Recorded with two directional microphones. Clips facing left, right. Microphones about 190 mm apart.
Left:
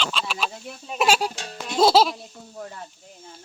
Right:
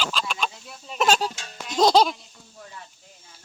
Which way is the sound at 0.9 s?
10° left (ahead or behind).